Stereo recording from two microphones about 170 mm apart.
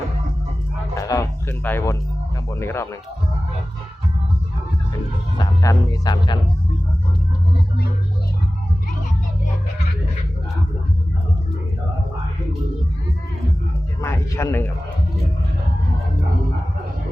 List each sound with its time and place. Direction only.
0.9 s speech: 20° left (ahead or behind)
5.4 s speech: 25° left (ahead or behind)
14.0 s a sound: 15° left (ahead or behind)